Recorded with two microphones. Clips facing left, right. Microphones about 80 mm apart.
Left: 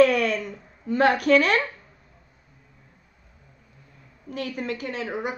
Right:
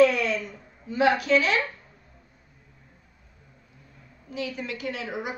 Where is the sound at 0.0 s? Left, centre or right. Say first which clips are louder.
Left 2 dB; left.